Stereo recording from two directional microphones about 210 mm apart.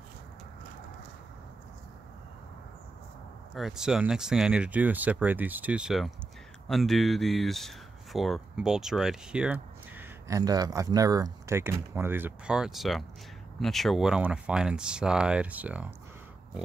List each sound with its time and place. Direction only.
3.5 s speech: centre (ahead or behind)